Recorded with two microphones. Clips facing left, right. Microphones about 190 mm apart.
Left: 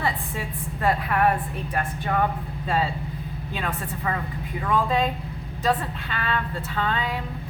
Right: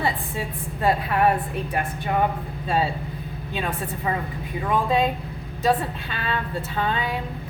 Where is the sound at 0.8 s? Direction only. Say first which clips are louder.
Right 2 dB; 25° right (ahead or behind).